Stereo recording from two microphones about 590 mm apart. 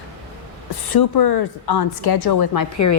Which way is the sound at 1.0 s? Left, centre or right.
Left.